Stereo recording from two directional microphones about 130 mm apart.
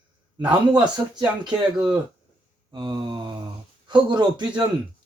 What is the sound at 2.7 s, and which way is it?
Speech, 40° right (ahead or behind).